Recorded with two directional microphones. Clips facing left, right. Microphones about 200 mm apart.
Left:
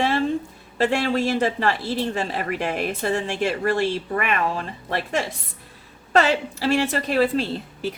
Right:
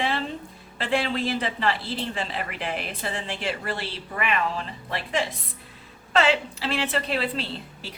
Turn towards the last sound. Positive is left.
turn(degrees=50)  # may be behind; listen again after turning